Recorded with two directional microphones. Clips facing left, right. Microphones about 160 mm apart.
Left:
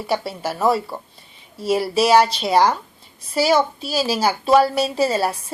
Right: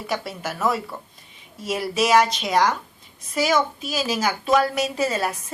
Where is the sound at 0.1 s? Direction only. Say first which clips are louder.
Left 5 dB; 30° left (ahead or behind).